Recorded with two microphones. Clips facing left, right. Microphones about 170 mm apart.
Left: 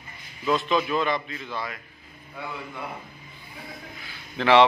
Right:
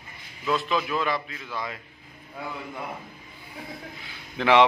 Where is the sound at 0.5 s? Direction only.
Centre (ahead or behind).